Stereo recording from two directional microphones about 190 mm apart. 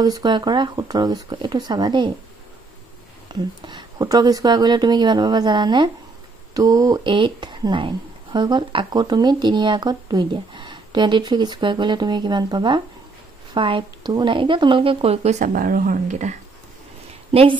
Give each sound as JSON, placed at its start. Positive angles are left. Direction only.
{"t": 0.0, "sound": "speech", "side_deg": -20}
{"t": 3.3, "sound": "a woman's voice", "side_deg": -20}